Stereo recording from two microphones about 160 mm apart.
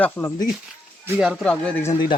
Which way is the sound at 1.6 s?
5° left (ahead or behind).